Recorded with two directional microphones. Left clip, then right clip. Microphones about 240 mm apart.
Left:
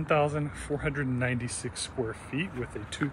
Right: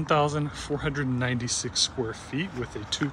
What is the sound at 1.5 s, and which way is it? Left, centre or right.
Speech, left.